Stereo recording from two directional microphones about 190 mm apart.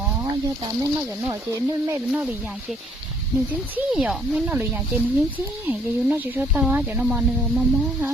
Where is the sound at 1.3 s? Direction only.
15° right (ahead or behind).